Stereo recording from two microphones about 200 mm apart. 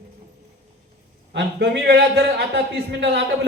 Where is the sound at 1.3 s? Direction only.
60° right (ahead or behind).